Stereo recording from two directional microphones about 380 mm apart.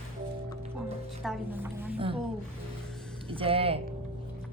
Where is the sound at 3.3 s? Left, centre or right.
Centre.